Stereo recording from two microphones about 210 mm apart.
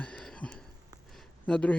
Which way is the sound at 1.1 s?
5° left (ahead or behind).